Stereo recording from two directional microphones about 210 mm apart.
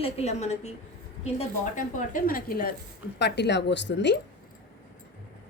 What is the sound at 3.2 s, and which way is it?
A woman's voice, 55° left (ahead or behind).